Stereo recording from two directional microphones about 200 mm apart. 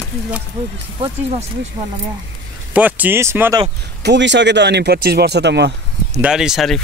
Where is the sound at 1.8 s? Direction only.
20° right (ahead or behind).